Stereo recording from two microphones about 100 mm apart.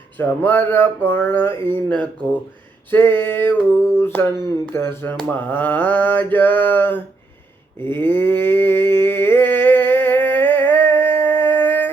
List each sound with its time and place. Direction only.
0.2 s speech: 20° left (ahead or behind)
1.9 s mantra: 15° left (ahead or behind)
2.9 s speech: 20° left (ahead or behind)
5.3 s mantra: 15° left (ahead or behind)
7.8 s a sound: 20° left (ahead or behind)